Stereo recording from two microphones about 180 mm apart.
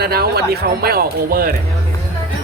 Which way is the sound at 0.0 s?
60° right (ahead or behind).